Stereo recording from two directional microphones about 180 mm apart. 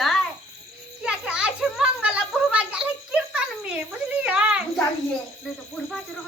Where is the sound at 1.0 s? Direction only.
5° right (ahead or behind).